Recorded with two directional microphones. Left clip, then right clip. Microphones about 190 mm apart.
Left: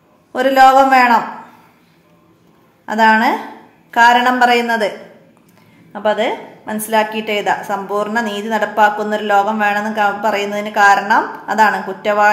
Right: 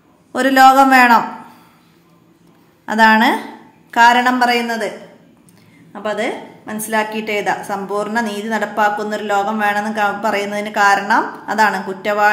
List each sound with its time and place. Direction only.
0.3 s a man's voice: 15° right (ahead or behind)
2.8 s a man's voice: 15° right (ahead or behind); by 4.9 s 5° left (ahead or behind)
5.9 s a woman's voice: centre (ahead or behind)